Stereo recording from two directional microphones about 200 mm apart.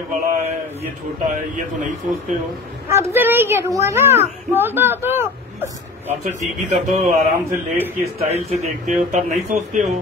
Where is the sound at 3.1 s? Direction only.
10° right (ahead or behind).